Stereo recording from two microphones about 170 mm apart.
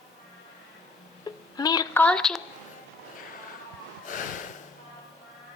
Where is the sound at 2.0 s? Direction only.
5° left (ahead or behind).